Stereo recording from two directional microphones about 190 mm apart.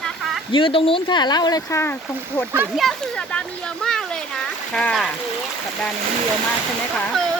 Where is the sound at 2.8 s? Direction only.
5° left (ahead or behind).